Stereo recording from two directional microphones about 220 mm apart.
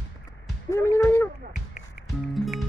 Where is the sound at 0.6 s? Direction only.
10° left (ahead or behind).